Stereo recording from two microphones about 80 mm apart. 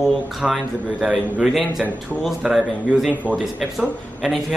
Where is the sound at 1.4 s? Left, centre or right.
Centre.